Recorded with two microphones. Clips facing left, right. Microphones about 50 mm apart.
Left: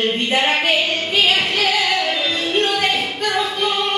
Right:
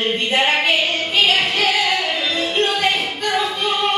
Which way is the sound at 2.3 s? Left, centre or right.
Right.